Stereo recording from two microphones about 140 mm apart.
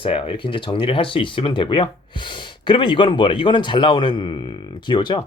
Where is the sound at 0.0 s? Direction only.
40° left (ahead or behind).